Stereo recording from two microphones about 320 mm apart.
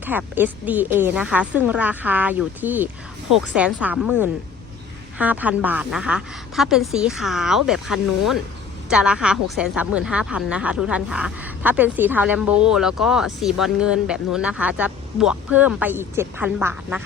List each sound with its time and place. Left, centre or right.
0.0 s speech: centre